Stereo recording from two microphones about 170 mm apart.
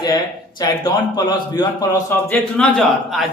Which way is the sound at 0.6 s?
20° left (ahead or behind).